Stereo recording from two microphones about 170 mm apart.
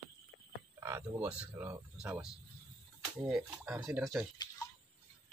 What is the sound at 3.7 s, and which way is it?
Speech, 5° right (ahead or behind).